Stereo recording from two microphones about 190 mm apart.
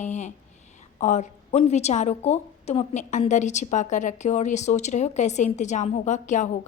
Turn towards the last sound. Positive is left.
turn(degrees=40)  # may be behind; listen again after turning